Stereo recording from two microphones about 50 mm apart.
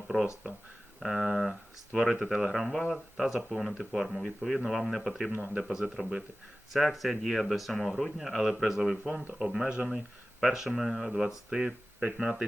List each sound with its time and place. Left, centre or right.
0.9 s speech: centre
5.4 s speech: centre